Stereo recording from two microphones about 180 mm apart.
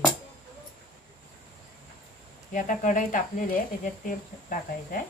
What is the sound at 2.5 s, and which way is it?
Speech, 45° left (ahead or behind).